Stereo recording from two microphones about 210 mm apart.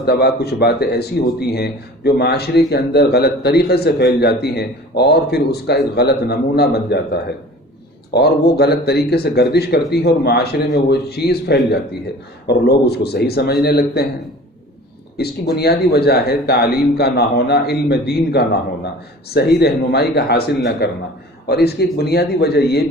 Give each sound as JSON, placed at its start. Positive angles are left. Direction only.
{"t": 0.0, "sound": "speech", "side_deg": 50}
{"t": 15.2, "sound": "speech", "side_deg": 50}